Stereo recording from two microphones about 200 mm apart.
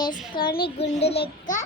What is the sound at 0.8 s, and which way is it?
Speech, 30° left (ahead or behind).